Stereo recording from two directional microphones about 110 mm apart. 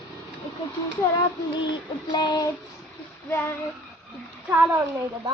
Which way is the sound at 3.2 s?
20° left (ahead or behind).